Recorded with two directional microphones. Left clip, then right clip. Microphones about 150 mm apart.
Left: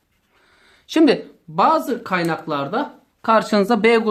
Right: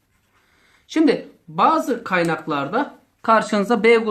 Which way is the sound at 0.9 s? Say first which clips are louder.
Left 2 dB; 40° left (ahead or behind).